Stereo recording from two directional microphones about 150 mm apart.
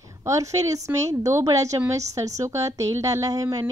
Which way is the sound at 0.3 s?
20° right (ahead or behind).